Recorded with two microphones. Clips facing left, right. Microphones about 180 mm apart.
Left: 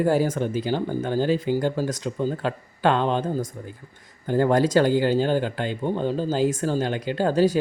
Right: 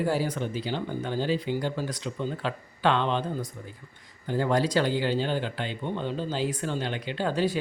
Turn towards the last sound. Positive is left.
turn(degrees=40)  # may be behind; listen again after turning